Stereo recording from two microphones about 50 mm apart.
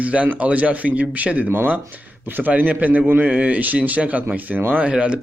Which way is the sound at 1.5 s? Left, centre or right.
Right.